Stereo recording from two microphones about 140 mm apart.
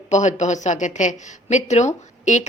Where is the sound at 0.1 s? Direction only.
55° left (ahead or behind).